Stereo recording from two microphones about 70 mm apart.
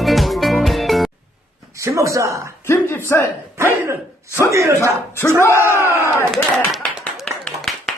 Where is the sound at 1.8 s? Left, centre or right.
Right.